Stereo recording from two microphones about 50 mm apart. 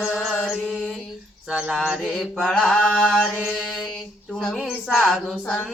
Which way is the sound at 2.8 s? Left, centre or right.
Left.